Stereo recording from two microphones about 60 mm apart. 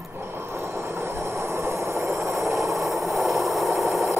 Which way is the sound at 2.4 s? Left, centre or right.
Centre.